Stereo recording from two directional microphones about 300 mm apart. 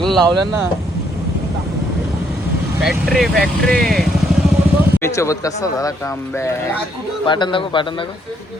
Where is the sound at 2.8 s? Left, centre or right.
Centre.